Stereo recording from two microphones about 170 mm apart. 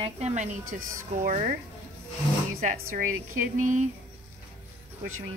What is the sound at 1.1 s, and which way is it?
Speech, 50° right (ahead or behind).